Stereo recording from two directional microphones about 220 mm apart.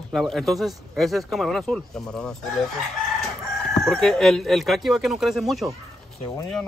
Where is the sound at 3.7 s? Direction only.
Centre (ahead or behind).